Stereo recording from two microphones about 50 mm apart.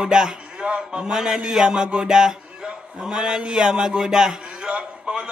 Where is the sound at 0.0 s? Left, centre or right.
Centre.